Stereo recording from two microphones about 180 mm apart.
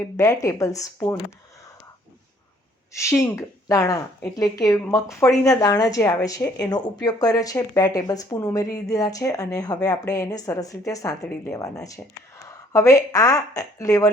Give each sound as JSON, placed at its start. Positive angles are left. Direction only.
{"t": 0.2, "sound": "speech", "side_deg": 15}
{"t": 2.9, "sound": "speech", "side_deg": 15}